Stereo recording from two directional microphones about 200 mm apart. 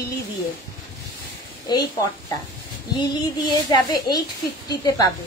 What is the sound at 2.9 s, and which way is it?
A woman's voice, 20° left (ahead or behind).